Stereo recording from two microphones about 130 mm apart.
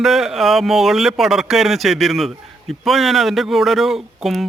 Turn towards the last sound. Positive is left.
turn(degrees=0)  # may be behind; listen again after turning